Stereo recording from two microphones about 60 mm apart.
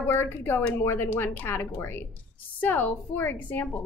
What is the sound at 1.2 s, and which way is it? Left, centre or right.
Speech, left.